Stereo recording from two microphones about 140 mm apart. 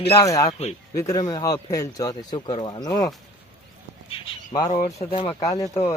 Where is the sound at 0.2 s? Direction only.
25° left (ahead or behind).